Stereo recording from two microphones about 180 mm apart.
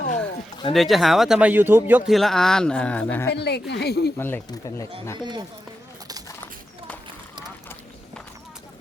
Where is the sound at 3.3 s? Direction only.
70° left (ahead or behind).